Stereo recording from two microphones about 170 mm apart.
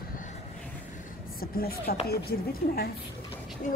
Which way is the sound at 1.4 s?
60° left (ahead or behind).